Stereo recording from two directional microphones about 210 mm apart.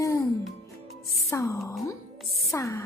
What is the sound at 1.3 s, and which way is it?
Speech, 15° left (ahead or behind).